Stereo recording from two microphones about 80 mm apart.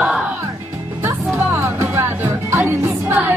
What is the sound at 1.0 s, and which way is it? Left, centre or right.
Music, right.